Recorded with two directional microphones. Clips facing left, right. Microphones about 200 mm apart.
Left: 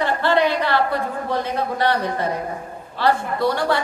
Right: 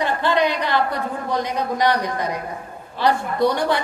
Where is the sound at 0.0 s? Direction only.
15° right (ahead or behind).